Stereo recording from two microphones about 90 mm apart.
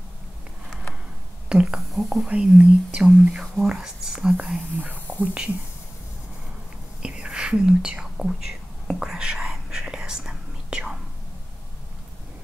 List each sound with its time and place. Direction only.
1.5 s speech: 5° right (ahead or behind)
4.7 s speech: 20° right (ahead or behind)
7.0 s whispering: 10° right (ahead or behind)